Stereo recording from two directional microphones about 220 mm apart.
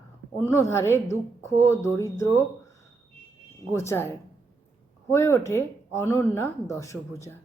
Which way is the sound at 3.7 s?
10° left (ahead or behind).